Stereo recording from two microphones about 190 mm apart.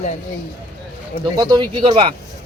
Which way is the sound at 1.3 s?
20° right (ahead or behind).